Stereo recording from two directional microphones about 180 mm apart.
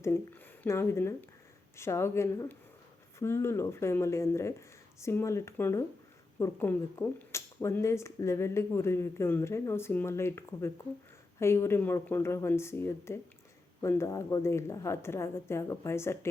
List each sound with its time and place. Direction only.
0.0 s speech: 10° left (ahead or behind)